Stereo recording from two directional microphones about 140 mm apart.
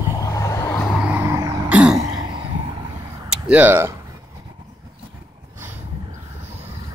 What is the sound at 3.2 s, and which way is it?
Speech, 10° right (ahead or behind).